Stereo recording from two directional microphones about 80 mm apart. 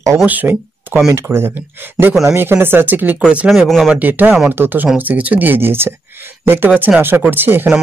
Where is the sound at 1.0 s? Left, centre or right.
Right.